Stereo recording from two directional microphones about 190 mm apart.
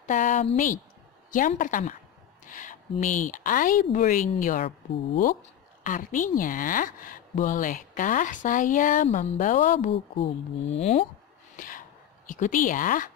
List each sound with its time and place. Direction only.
0.0 s a woman's voice: 40° left (ahead or behind)
10.1 s speech: 30° left (ahead or behind)
11.5 s a sound: 45° left (ahead or behind)
12.3 s a woman's voice: 45° left (ahead or behind)